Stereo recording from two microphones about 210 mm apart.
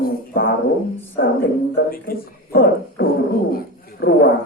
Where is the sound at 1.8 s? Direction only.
45° left (ahead or behind).